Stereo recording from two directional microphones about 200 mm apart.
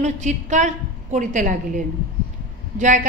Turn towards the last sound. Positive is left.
turn(degrees=-40)  # may be behind; listen again after turning